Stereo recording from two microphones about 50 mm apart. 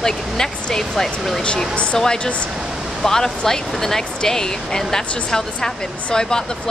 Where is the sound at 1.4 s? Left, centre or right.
Left.